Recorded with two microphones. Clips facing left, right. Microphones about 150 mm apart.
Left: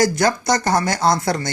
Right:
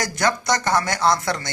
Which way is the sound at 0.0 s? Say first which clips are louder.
Left 5 dB; 35° left (ahead or behind).